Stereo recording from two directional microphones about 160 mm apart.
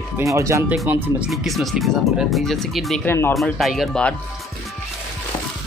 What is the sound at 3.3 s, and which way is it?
Speech, centre (ahead or behind).